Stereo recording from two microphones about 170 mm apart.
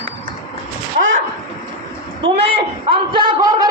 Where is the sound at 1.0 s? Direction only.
50° right (ahead or behind).